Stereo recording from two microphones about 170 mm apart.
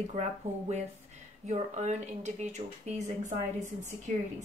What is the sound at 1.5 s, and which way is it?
Speech, 45° right (ahead or behind).